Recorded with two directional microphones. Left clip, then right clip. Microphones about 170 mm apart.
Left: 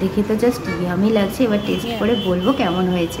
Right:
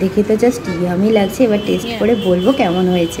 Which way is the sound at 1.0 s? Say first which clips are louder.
Right 5 dB; 10° right (ahead or behind).